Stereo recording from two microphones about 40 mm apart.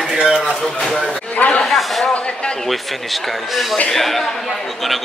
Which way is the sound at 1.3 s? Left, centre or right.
Left.